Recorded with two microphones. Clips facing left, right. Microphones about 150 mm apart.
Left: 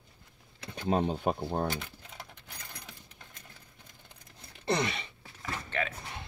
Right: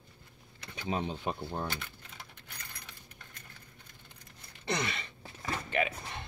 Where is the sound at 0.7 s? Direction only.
50° left (ahead or behind).